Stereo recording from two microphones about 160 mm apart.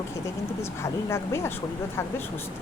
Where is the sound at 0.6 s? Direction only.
15° left (ahead or behind).